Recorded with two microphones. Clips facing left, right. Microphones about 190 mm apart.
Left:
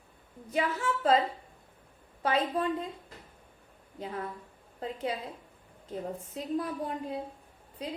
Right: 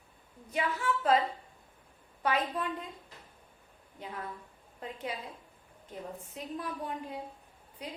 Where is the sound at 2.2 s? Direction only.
30° left (ahead or behind).